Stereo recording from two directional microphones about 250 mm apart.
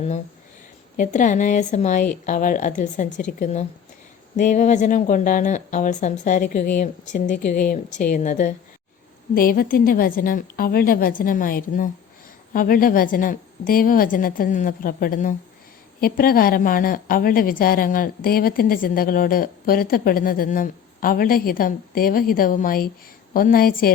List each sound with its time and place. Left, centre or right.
0.9 s a woman's voice: left